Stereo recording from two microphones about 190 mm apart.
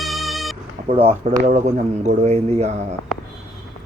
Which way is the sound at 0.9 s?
30° right (ahead or behind).